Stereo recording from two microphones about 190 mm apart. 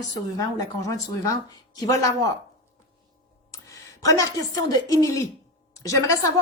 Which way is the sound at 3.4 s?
15° left (ahead or behind).